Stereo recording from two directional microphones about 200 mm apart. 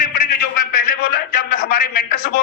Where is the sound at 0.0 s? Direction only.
45° left (ahead or behind).